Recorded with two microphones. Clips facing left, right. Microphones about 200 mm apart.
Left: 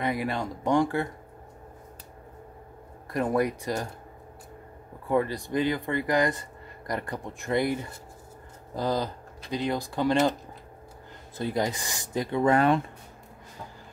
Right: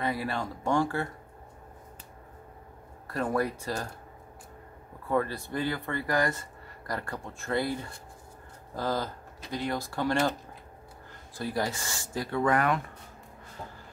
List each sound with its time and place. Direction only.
0.0 s speech: 15° left (ahead or behind)
3.1 s speech: 15° left (ahead or behind)
5.0 s speech: 15° left (ahead or behind)
11.3 s speech: 20° left (ahead or behind)